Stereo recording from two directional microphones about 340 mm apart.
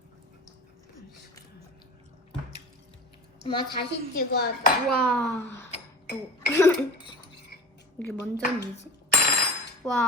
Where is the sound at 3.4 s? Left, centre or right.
Centre.